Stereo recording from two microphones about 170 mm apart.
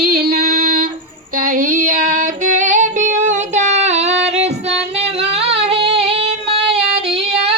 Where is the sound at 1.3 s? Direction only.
55° right (ahead or behind).